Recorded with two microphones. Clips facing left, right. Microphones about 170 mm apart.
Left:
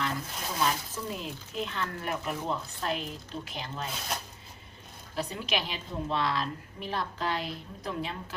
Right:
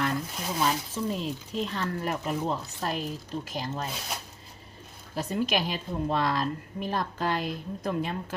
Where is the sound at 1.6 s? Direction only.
35° right (ahead or behind).